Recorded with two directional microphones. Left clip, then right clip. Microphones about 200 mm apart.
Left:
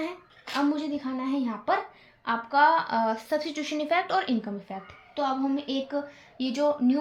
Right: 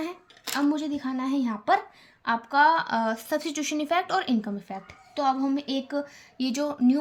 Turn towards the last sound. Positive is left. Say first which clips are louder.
# left 1 dB
turn(degrees=-45)  # may be behind; listen again after turning